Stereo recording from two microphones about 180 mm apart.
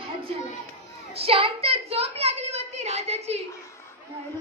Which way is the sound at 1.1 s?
30° right (ahead or behind).